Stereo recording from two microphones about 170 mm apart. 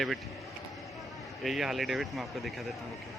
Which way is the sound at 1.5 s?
Centre (ahead or behind).